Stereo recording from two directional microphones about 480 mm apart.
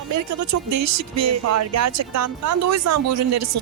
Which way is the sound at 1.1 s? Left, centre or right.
Right.